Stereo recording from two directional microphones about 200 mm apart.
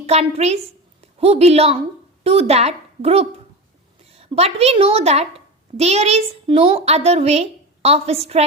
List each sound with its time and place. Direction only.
0.0 s a child's voice: 30° right (ahead or behind)